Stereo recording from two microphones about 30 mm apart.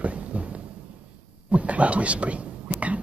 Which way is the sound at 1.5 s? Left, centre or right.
Right.